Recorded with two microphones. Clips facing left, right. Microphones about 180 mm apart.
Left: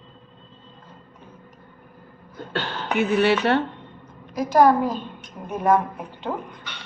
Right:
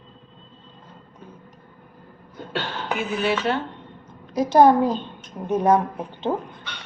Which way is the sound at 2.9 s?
70° left (ahead or behind).